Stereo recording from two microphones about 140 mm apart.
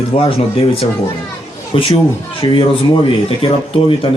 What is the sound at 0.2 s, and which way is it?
Speech, 40° left (ahead or behind).